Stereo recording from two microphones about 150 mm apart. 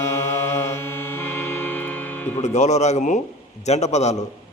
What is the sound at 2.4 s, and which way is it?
Music, 50° left (ahead or behind).